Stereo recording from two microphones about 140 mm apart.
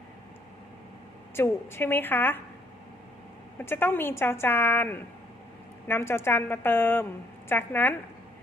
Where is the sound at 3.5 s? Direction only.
15° left (ahead or behind).